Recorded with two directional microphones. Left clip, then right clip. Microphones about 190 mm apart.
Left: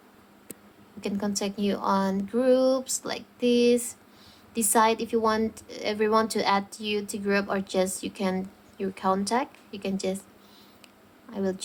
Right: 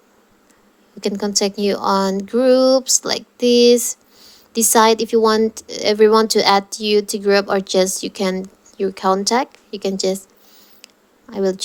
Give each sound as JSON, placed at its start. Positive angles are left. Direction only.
{"t": 1.0, "sound": "a woman's voice", "side_deg": -30}
{"t": 11.3, "sound": "a woman's voice", "side_deg": -30}